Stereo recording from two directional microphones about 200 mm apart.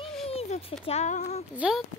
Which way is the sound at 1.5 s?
5° right (ahead or behind).